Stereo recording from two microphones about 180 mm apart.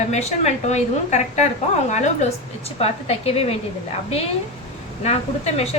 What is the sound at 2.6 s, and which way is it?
Speech, 35° left (ahead or behind).